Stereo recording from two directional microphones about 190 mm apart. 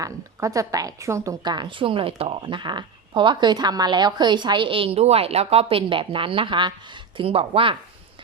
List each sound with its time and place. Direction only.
0.0 s a woman's voice: 15° right (ahead or behind)